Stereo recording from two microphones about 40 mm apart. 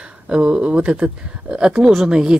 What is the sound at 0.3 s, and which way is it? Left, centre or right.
Speech, right.